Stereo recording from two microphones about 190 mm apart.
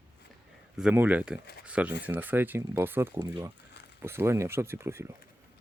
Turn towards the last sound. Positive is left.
turn(degrees=-15)  # may be behind; listen again after turning